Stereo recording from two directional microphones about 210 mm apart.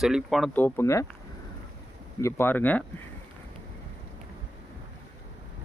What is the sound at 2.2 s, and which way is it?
Speech, 10° left (ahead or behind).